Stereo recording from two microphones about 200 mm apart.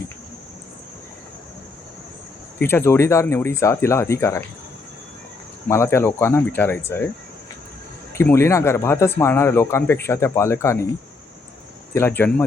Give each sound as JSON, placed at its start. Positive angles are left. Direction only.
{"t": 2.6, "sound": "speech", "side_deg": 10}
{"t": 5.6, "sound": "speech", "side_deg": 15}
{"t": 8.2, "sound": "speech", "side_deg": 15}
{"t": 11.9, "sound": "speech", "side_deg": 10}